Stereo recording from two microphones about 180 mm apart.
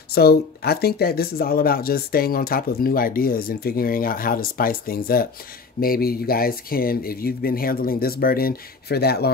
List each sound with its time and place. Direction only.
0.1 s speech: 60° left (ahead or behind)